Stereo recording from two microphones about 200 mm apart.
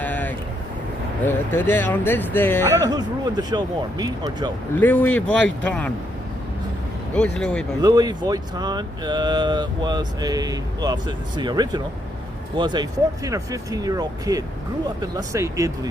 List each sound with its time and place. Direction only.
0.0 s vehicle: 10° left (ahead or behind)
1.2 s speech: 10° left (ahead or behind)
2.8 s speech: 20° right (ahead or behind)
4.8 s speech: 10° left (ahead or behind)
7.1 s speech: 5° left (ahead or behind)
7.8 s speech: 20° right (ahead or behind)